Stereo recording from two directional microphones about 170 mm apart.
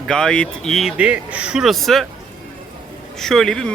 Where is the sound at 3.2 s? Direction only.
Centre (ahead or behind).